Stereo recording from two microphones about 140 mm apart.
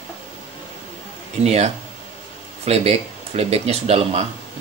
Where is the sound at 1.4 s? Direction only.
50° right (ahead or behind).